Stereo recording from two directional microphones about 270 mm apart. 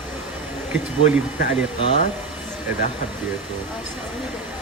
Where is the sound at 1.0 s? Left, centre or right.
Left.